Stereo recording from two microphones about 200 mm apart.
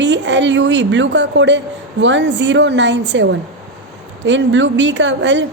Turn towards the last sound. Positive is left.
turn(degrees=-65)  # may be behind; listen again after turning